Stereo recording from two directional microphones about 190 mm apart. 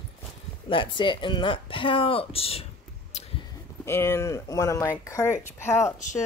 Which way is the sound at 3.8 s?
15° left (ahead or behind).